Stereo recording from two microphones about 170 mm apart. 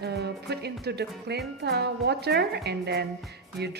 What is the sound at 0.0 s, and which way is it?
Music, 75° right (ahead or behind).